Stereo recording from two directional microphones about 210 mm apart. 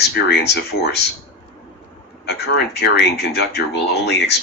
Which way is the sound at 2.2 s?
50° left (ahead or behind).